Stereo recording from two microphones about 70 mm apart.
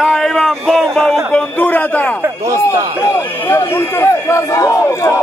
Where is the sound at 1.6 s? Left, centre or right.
Left.